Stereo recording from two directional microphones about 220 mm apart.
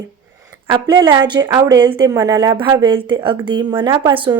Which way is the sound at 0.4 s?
20° right (ahead or behind).